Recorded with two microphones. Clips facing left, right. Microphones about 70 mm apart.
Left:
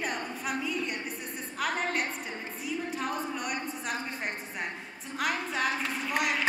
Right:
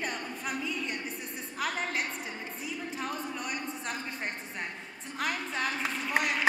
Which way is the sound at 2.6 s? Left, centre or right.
Centre.